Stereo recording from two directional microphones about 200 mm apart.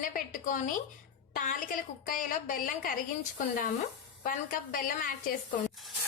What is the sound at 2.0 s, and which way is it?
A woman's voice, 45° left (ahead or behind).